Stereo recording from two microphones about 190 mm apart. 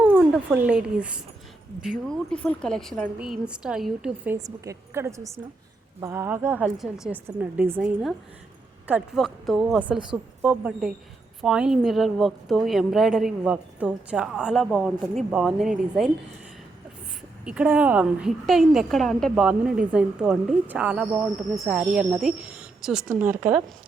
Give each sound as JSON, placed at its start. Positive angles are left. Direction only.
{"t": 0.0, "sound": "a woman's voice", "side_deg": -10}
{"t": 4.4, "sound": "a woman's voice", "side_deg": -15}
{"t": 17.4, "sound": "a woman's voice", "side_deg": -5}